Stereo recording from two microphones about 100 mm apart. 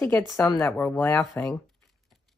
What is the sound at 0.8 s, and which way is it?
Speech, 20° left (ahead or behind).